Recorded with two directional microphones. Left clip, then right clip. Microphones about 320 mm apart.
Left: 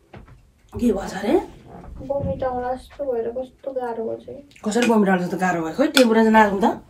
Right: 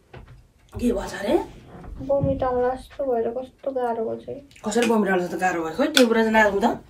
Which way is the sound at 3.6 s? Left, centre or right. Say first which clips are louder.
Right 2 dB; centre.